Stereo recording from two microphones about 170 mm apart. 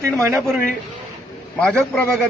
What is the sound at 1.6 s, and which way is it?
Speech, centre (ahead or behind).